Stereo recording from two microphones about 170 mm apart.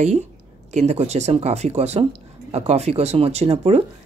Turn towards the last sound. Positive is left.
turn(degrees=-35)  # may be behind; listen again after turning